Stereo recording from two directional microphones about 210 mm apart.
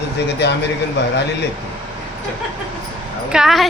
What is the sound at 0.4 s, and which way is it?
Speech, 55° left (ahead or behind).